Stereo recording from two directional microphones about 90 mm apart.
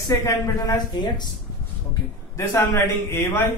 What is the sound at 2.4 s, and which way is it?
Speech, 30° left (ahead or behind).